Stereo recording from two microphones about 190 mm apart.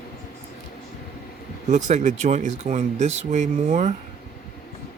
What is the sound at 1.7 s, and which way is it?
Speech, 40° right (ahead or behind).